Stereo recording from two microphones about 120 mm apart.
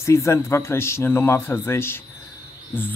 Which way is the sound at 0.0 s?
25° left (ahead or behind).